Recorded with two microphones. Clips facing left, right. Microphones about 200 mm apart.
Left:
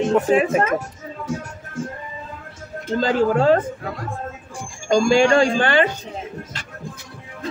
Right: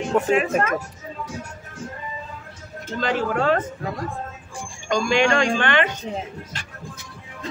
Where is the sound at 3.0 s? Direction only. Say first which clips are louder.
Left 5 dB; 30° left (ahead or behind).